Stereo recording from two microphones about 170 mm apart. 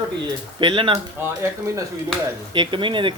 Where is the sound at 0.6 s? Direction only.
30° right (ahead or behind).